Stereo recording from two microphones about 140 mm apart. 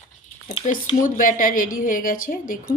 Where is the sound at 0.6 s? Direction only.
55° left (ahead or behind).